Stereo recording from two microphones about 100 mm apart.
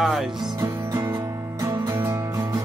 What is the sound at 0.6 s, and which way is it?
Music, 40° right (ahead or behind).